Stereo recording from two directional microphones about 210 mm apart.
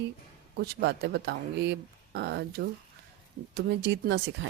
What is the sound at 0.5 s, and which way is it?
Speech, 50° right (ahead or behind).